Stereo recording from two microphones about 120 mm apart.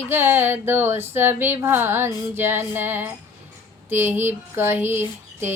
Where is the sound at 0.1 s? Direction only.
15° right (ahead or behind).